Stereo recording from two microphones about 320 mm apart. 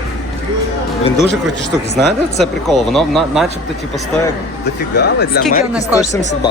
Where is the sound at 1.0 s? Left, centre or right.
Centre.